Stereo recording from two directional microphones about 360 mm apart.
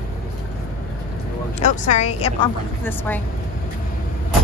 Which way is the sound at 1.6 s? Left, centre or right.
Centre.